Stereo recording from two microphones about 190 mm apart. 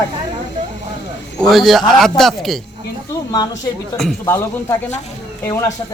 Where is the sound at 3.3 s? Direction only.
20° left (ahead or behind).